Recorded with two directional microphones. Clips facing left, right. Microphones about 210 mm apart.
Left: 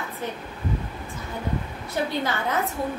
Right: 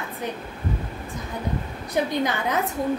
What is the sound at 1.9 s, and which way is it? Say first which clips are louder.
Speech: right 3 dB; 15° right (ahead or behind).